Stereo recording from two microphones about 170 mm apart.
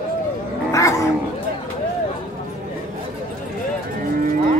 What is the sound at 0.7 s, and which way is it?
Cat, 20° left (ahead or behind).